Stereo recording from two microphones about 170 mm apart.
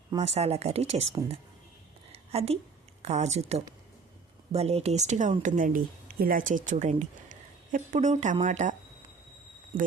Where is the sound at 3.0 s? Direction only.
40° right (ahead or behind).